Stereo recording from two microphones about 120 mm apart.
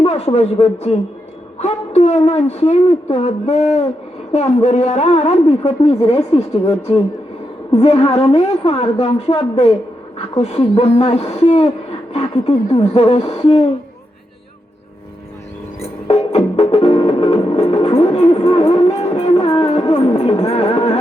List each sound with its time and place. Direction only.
0.0 s a man's voice: 55° left (ahead or behind)
16.0 s music: 60° left (ahead or behind)